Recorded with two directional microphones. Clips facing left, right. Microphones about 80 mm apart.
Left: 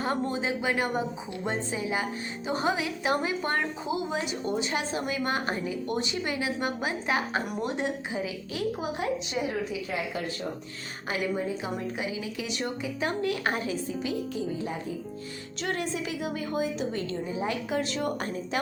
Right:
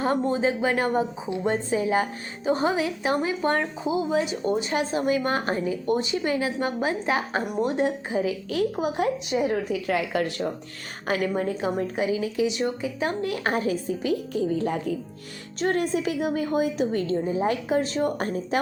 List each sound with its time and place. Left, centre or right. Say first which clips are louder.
0.0 s a woman's voice: right 6 dB; right
9.8 s speech: right 7 dB; right
11.0 s speech: right 5 dB; right
11.6 s a woman's voice: right 7 dB; right
12.5 s a woman's voice: right 5 dB; right
15.6 s a woman's voice: right 7 dB; right